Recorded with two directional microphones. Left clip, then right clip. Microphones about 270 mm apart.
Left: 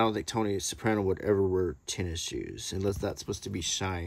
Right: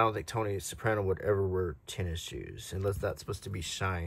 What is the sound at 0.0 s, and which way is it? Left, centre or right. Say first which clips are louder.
Speech: left 1 dB; centre.